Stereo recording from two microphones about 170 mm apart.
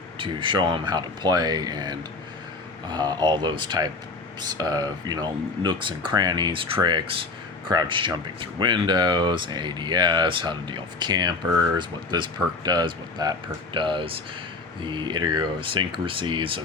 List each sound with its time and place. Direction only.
0.2 s speech: 30° right (ahead or behind)